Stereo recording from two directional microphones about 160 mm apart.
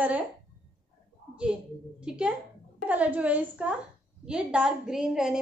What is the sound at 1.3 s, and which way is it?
A woman's voice, 5° right (ahead or behind).